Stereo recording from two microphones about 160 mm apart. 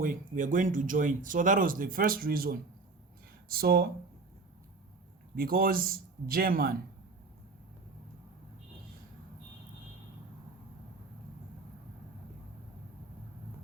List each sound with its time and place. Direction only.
0.0 s speech: 55° right (ahead or behind); by 3.8 s 75° right (ahead or behind)
5.4 s speech: 65° right (ahead or behind)